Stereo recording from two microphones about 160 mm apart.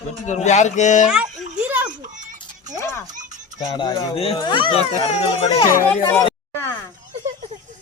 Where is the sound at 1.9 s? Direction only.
50° right (ahead or behind).